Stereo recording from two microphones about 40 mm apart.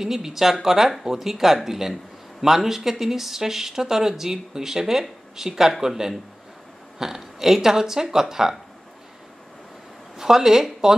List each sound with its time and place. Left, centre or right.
0.0 s speech: centre
10.1 s speech: centre